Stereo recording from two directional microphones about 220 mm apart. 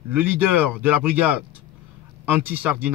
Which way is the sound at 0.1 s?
10° right (ahead or behind).